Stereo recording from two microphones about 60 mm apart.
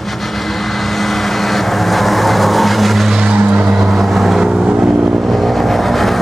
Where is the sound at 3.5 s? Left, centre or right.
Centre.